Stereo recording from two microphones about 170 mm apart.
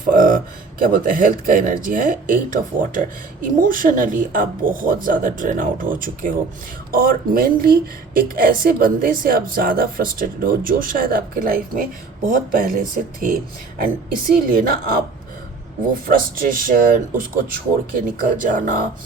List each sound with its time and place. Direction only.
0.0 s a woman's voice: 55° right (ahead or behind)
16.0 s a woman's voice: 55° right (ahead or behind)